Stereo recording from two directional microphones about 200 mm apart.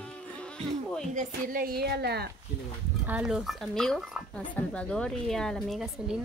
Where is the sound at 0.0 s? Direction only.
5° left (ahead or behind).